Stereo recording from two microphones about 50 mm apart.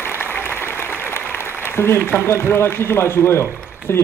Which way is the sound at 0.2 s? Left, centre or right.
Left.